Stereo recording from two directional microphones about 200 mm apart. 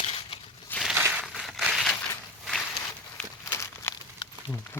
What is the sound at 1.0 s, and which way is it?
Crushing, 10° right (ahead or behind).